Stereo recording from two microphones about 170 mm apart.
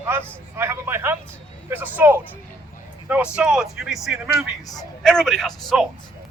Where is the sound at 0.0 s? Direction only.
10° right (ahead or behind).